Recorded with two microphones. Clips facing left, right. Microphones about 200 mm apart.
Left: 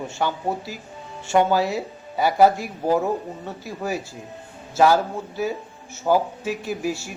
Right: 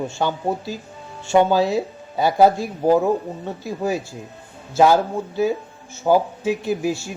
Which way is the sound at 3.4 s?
20° right (ahead or behind).